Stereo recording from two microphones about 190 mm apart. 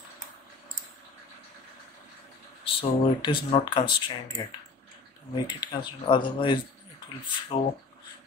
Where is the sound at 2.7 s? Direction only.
25° left (ahead or behind).